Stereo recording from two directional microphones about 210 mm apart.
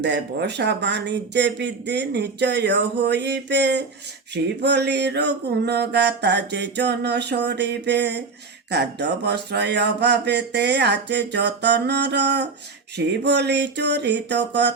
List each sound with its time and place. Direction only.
0.0 s speech: 55° right (ahead or behind)